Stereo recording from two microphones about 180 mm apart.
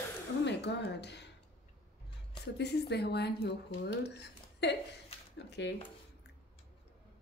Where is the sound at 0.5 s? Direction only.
70° left (ahead or behind).